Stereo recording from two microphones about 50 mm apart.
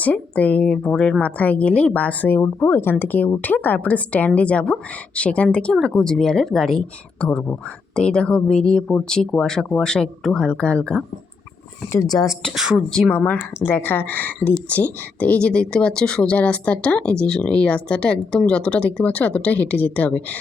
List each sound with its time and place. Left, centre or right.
0.0 s a woman's voice: left
0.7 s speech: centre
1.2 s a woman's voice: left; by 6.8 s centre
7.2 s speech: centre
12.1 s a woman's voice: left
12.5 s a woman's voice: centre
13.1 s a woman's voice: left